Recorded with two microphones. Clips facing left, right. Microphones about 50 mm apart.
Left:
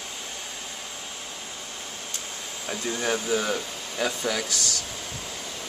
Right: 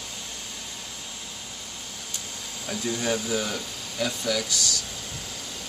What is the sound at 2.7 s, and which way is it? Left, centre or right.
Speech, centre.